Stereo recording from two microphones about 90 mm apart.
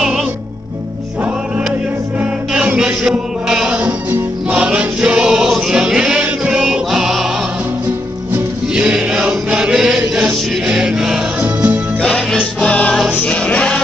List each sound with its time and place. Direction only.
2.5 s chant: 10° right (ahead or behind)
3.8 s music: 15° right (ahead or behind)
8.7 s chant: 10° right (ahead or behind)
11.4 s music: 20° right (ahead or behind)
12.0 s music: 5° left (ahead or behind)